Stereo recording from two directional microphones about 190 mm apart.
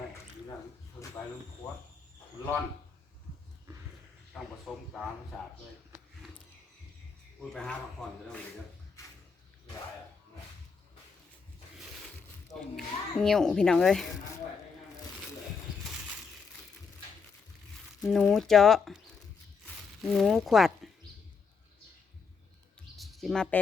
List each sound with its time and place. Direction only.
4.3 s speech: centre (ahead or behind)
7.5 s speech: 5° left (ahead or behind)
12.5 s speech: 5° left (ahead or behind)
18.0 s speech: centre (ahead or behind)
23.0 s a sound: centre (ahead or behind)